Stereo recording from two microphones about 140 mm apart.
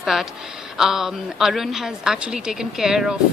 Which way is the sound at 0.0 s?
Centre (ahead or behind).